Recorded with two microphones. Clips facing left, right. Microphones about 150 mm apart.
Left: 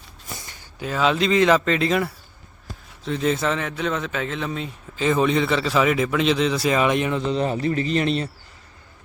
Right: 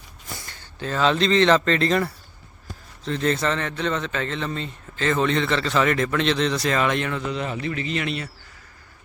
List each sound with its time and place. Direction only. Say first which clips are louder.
0.3 s a man's voice: even; 15° left (ahead or behind)
7.3 s a man's voice: left 5 dB; 35° left (ahead or behind)